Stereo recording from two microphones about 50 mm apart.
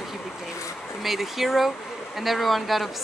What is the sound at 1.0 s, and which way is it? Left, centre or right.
Speech, centre.